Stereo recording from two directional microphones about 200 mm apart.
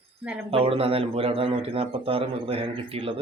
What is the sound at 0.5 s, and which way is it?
Speech, 30° right (ahead or behind).